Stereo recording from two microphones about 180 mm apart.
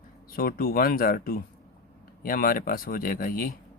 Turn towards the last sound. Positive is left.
turn(degrees=55)  # may be behind; listen again after turning